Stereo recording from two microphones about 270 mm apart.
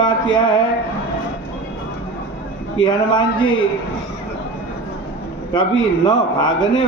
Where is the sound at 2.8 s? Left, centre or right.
Centre.